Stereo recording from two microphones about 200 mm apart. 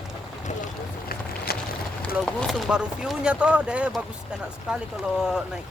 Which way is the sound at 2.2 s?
Centre (ahead or behind).